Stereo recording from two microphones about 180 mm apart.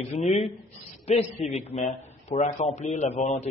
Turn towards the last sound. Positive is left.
turn(degrees=40)  # may be behind; listen again after turning